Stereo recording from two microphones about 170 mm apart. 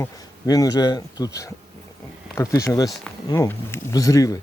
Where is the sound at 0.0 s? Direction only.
20° left (ahead or behind).